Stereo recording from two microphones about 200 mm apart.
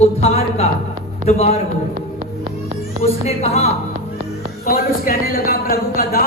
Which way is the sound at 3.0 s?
30° left (ahead or behind).